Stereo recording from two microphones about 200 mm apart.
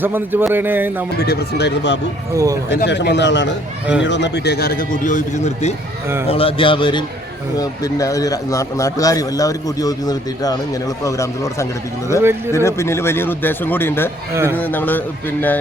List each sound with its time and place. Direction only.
0.0 s a man's voice: 10° right (ahead or behind)
1.2 s a man's voice: 55° left (ahead or behind)
2.3 s a man's voice: 15° right (ahead or behind)
2.6 s a man's voice: 60° left (ahead or behind); by 15.6 s 10° left (ahead or behind)